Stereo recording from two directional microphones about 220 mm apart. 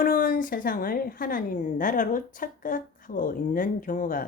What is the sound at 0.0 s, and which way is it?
A woman's voice, 40° left (ahead or behind).